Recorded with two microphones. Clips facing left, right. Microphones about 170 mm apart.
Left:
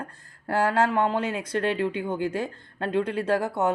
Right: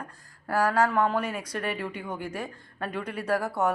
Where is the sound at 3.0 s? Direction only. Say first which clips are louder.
Left 5 dB; 25° left (ahead or behind).